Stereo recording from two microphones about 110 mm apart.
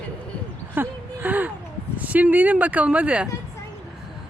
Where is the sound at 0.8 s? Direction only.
15° right (ahead or behind).